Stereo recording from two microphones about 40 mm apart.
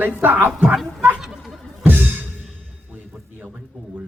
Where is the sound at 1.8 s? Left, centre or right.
Right.